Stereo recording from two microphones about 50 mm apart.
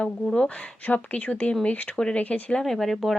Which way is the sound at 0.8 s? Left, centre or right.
Left.